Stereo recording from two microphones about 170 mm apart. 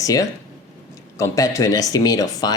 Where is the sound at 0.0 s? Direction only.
20° left (ahead or behind).